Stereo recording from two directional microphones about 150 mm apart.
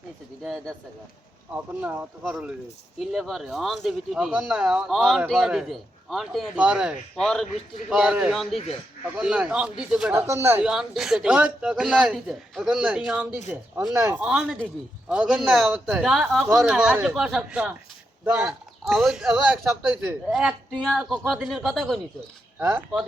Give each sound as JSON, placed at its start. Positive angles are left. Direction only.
{"t": 0.4, "sound": "a man's voice", "side_deg": 5}
{"t": 1.5, "sound": "a man's voice", "side_deg": -10}
{"t": 10.2, "sound": "speech", "side_deg": -20}
{"t": 10.6, "sound": "a man's voice", "side_deg": -5}
{"t": 22.6, "sound": "speech", "side_deg": -10}